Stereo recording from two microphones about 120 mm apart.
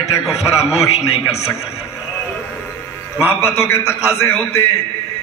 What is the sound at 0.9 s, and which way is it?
Speech, 60° left (ahead or behind).